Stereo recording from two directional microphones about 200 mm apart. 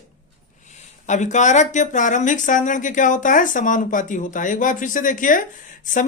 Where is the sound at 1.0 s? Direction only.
35° left (ahead or behind).